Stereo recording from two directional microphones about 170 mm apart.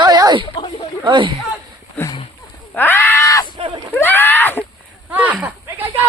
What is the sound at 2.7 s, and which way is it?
Speech, 10° left (ahead or behind).